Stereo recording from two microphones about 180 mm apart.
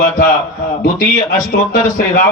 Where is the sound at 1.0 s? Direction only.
50° left (ahead or behind).